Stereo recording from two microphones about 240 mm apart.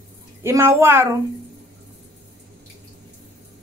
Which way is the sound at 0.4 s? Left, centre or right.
Centre.